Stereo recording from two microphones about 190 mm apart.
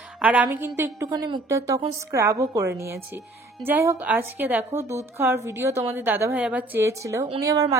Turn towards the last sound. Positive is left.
turn(degrees=-20)  # may be behind; listen again after turning